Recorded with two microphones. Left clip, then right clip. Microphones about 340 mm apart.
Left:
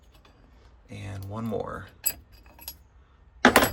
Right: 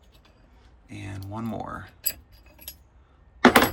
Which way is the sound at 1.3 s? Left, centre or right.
Centre.